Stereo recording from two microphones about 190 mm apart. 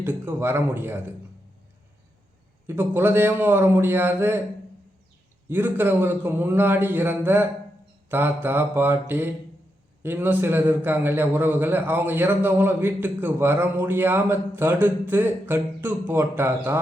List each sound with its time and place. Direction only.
0.0 s a man's voice: 10° right (ahead or behind)
2.6 s a man's voice: 10° right (ahead or behind)
5.5 s a man's voice: 10° right (ahead or behind)